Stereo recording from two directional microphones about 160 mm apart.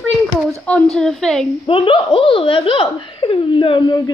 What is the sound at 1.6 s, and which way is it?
Speech, 30° left (ahead or behind).